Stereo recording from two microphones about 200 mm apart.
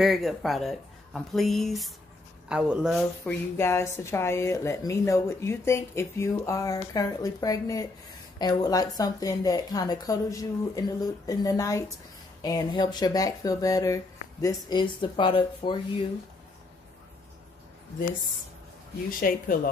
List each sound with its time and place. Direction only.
0.0 s speech: centre (ahead or behind)
3.3 s speech: 10° left (ahead or behind)
19.0 s speech: 45° left (ahead or behind)